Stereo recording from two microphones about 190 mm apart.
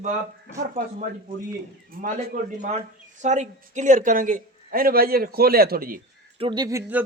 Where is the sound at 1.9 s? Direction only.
45° right (ahead or behind).